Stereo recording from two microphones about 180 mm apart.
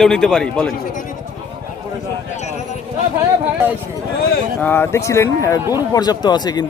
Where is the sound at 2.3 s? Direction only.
40° left (ahead or behind).